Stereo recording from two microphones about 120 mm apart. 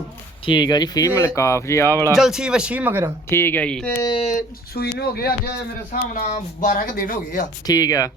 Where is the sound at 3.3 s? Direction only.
20° left (ahead or behind).